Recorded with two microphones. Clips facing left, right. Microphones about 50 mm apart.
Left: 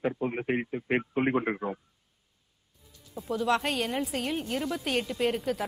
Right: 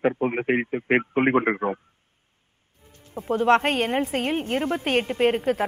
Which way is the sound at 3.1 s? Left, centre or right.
Right.